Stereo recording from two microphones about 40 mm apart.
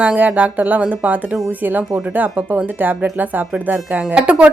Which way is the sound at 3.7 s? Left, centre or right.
Right.